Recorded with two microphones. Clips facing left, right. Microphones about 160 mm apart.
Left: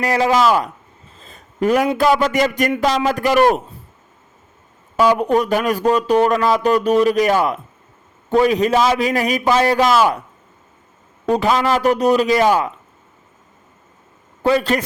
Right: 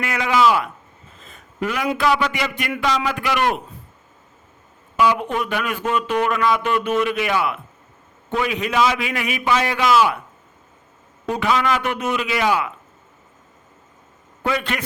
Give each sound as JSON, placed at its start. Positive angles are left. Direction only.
{"t": 0.0, "sound": "speech", "side_deg": 35}
{"t": 1.2, "sound": "a sound", "side_deg": 35}
{"t": 2.0, "sound": "speech", "side_deg": 45}
{"t": 4.9, "sound": "speech", "side_deg": 40}
{"t": 11.3, "sound": "speech", "side_deg": 35}
{"t": 14.4, "sound": "speech", "side_deg": 35}